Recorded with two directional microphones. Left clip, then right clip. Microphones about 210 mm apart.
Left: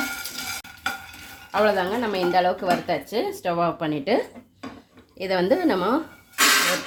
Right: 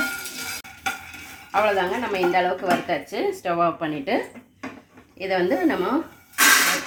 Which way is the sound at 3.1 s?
80° left.